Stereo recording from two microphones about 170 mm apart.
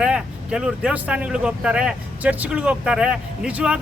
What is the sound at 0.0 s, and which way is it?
Speech, 5° right (ahead or behind).